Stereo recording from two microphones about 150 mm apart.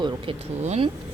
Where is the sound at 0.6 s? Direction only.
45° right (ahead or behind).